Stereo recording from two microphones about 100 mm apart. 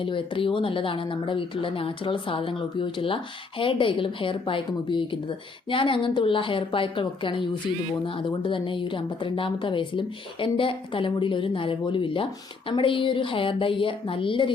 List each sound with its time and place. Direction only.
0.0 s speech: 60° left (ahead or behind)